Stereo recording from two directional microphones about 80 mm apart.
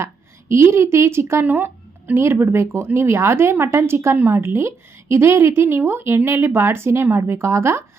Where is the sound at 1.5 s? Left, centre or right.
Right.